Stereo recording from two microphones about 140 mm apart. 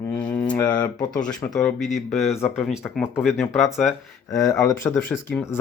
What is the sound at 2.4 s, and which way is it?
Speech, 20° left (ahead or behind).